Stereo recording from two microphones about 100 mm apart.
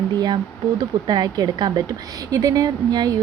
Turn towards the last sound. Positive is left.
turn(degrees=-45)  # may be behind; listen again after turning